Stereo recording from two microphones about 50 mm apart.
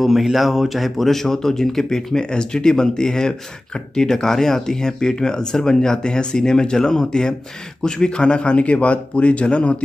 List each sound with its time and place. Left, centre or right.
0.0 s speech: centre; by 9.8 s left